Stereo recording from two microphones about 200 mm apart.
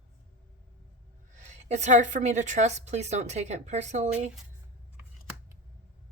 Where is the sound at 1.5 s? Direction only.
35° right (ahead or behind).